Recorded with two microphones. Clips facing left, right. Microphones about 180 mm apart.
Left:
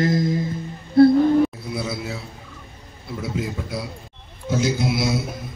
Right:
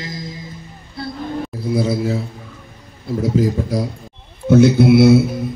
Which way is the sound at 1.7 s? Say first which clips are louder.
Right 10 dB; 35° right (ahead or behind).